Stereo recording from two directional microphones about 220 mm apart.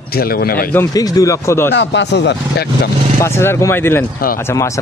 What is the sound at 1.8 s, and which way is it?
Speech, 55° left (ahead or behind).